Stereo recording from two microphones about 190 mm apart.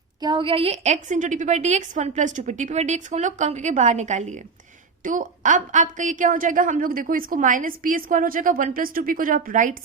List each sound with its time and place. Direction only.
0.2 s a woman's voice: 25° right (ahead or behind); by 9.7 s 45° right (ahead or behind)